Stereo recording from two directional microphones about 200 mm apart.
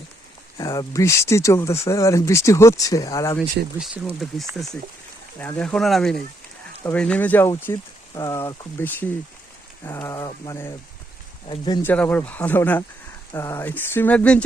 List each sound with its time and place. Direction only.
0.5 s speech: 20° left (ahead or behind)
3.8 s speech: 5° right (ahead or behind); by 11.8 s 25° left (ahead or behind)
11.8 s speech: 10° left (ahead or behind)